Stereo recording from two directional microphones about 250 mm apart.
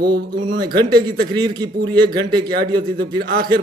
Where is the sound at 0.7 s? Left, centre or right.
Centre.